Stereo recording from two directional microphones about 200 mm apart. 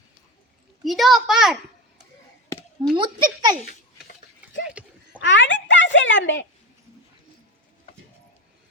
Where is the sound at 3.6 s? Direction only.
50° left (ahead or behind).